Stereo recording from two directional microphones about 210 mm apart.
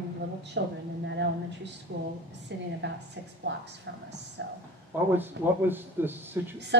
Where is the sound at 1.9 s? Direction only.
50° right (ahead or behind).